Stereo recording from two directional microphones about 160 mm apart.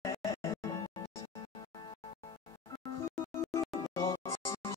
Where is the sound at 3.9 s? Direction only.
20° left (ahead or behind).